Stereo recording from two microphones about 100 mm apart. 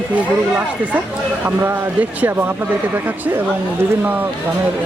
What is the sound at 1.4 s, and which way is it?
A man's voice, 20° right (ahead or behind).